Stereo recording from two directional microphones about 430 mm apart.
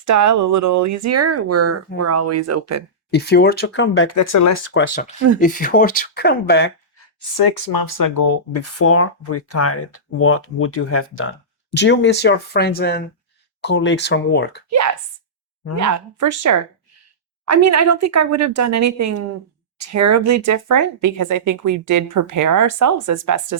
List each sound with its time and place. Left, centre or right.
0.0 s speech: right
3.1 s speech: left
4.1 s speech: left
4.7 s speech: left
7.2 s speech: left
15.7 s speech: right